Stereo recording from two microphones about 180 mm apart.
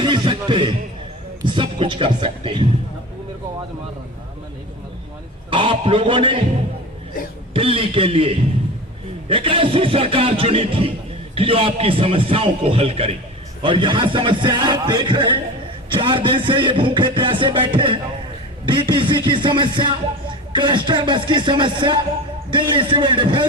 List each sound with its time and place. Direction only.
0.0 s music: 25° right (ahead or behind)
5.5 s music: 30° right (ahead or behind)
7.5 s a man's voice: 30° right (ahead or behind)
13.6 s music: 30° right (ahead or behind)